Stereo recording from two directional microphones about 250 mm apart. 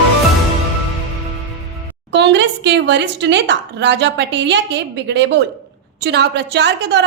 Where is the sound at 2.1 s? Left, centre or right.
Right.